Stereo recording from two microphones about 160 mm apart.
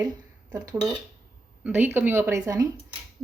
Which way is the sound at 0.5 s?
25° right (ahead or behind).